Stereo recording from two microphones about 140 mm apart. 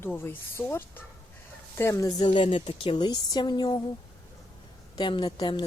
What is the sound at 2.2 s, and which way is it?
Speech, 40° left (ahead or behind).